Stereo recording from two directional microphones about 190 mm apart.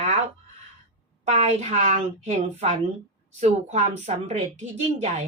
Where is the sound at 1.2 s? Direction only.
35° right (ahead or behind).